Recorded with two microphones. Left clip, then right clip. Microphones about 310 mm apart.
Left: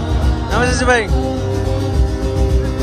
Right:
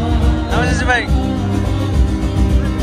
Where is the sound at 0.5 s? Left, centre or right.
Centre.